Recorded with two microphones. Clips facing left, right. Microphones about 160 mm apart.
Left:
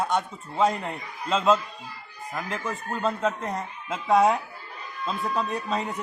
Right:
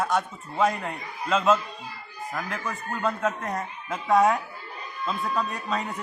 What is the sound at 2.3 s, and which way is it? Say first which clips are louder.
A man's voice: left 1 dB; 25° left (ahead or behind).